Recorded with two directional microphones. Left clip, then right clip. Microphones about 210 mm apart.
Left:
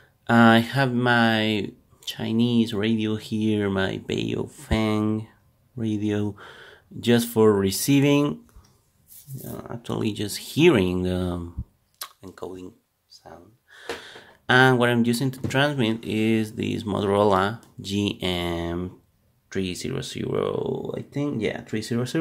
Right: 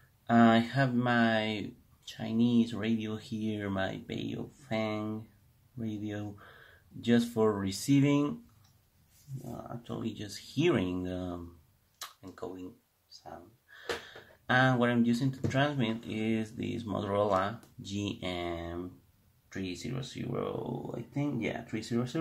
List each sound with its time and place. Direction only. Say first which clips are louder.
0.3 s speech: left 8 dB; 45° left (ahead or behind)
9.8 s speech: left 14 dB; 45° left (ahead or behind)
12.0 s a sound: left 6 dB; 45° left (ahead or behind)
13.1 s speech: left 3 dB; 50° left (ahead or behind)